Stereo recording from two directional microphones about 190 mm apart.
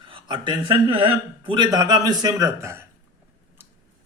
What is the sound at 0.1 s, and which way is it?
A man's voice, 25° right (ahead or behind).